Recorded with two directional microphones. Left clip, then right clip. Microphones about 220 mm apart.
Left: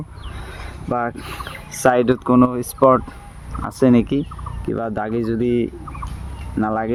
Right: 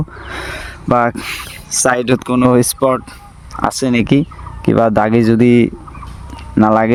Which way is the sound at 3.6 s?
50° right (ahead or behind).